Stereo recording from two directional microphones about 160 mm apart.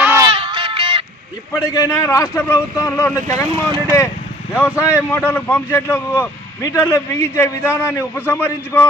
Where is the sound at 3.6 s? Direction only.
30° right (ahead or behind).